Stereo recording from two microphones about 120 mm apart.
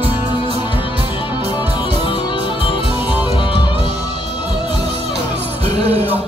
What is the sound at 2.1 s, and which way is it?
Music, 45° left (ahead or behind).